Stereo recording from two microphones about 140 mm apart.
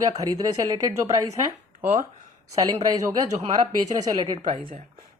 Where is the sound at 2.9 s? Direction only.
25° right (ahead or behind).